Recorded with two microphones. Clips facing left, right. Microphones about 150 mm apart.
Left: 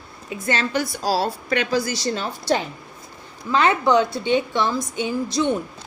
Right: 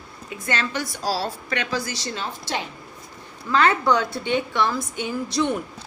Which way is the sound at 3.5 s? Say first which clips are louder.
Left 2 dB; 20° left (ahead or behind).